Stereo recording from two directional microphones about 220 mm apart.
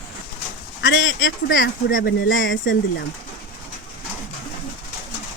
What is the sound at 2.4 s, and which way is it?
Speech, 60° left (ahead or behind).